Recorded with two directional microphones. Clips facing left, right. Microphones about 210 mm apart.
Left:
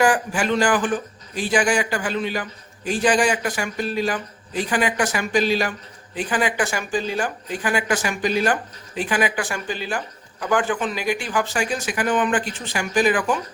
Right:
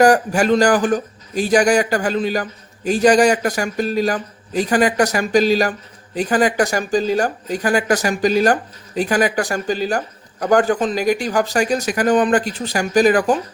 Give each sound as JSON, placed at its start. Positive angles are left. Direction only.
{"t": 0.0, "sound": "a man's voice", "side_deg": -40}